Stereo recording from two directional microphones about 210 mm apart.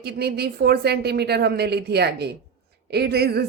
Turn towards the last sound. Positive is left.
turn(degrees=-50)  # may be behind; listen again after turning